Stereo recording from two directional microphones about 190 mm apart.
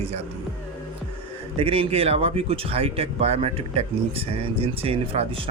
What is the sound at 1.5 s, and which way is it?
Speech, 30° right (ahead or behind).